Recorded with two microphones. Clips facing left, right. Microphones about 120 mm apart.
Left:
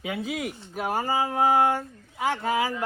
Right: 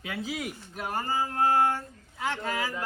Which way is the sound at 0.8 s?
80° left.